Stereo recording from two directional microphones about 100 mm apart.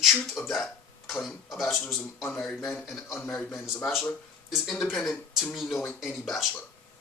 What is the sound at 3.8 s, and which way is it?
Speech, centre (ahead or behind).